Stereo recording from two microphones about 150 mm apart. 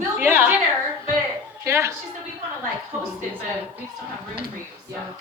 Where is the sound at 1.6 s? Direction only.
20° right (ahead or behind).